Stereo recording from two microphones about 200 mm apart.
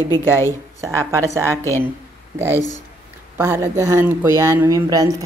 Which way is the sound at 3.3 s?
10° right (ahead or behind).